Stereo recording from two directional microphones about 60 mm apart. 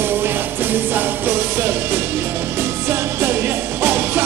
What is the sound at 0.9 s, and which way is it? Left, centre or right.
Music, right.